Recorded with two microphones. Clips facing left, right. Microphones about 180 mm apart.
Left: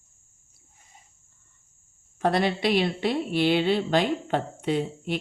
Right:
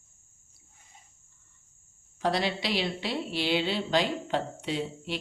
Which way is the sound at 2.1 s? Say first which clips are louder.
Left 4 dB; 55° left (ahead or behind).